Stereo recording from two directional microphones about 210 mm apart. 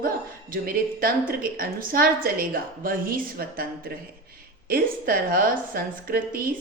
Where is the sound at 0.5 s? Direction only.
45° right (ahead or behind).